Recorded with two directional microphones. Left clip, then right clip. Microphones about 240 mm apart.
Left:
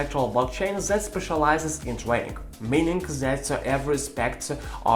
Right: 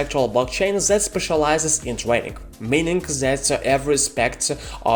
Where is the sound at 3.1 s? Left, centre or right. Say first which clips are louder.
Right 6 dB; right.